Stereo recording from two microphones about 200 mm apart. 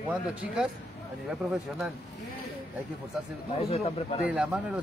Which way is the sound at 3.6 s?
30° left (ahead or behind).